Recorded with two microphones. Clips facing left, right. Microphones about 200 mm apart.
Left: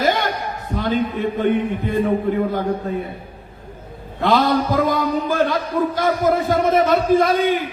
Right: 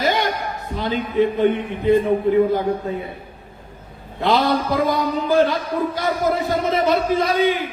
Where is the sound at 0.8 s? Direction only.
50° left (ahead or behind).